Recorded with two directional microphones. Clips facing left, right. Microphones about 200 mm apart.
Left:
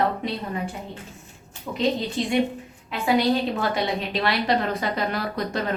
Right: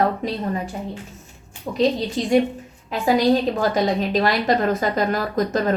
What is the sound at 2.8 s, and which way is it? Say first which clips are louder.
A woman's voice: right 4 dB; 40° right (ahead or behind).